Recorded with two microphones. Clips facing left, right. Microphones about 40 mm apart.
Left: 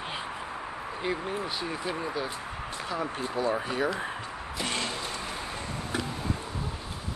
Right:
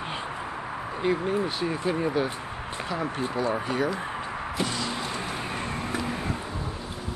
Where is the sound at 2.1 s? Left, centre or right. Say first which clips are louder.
Right 5 dB; right.